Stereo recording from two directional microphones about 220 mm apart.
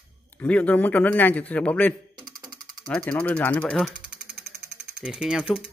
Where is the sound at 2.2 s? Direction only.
15° right (ahead or behind).